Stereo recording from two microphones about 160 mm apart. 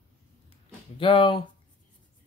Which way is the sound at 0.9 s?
30° left (ahead or behind).